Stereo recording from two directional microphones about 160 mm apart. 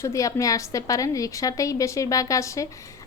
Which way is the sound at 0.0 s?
20° left (ahead or behind).